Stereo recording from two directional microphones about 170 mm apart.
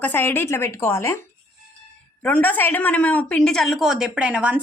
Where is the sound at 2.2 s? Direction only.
10° left (ahead or behind).